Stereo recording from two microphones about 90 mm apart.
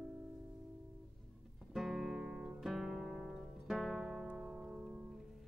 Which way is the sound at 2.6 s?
5° right (ahead or behind).